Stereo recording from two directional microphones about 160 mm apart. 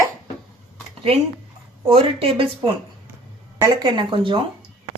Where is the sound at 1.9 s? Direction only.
35° right (ahead or behind).